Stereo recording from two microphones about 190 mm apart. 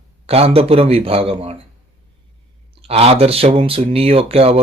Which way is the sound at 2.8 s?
30° right (ahead or behind).